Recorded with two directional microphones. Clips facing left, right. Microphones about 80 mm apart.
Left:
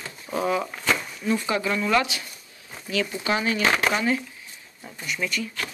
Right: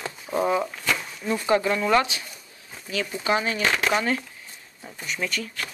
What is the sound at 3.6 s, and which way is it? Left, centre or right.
Speech, left.